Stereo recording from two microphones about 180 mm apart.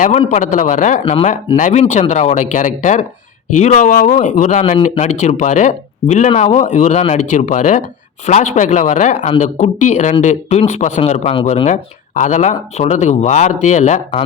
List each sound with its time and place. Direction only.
0.0 s speech: 40° left (ahead or behind)